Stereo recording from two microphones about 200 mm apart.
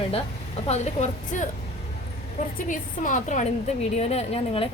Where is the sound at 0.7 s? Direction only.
35° left (ahead or behind).